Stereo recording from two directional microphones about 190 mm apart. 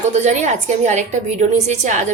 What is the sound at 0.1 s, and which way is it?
A woman's voice, 35° right (ahead or behind).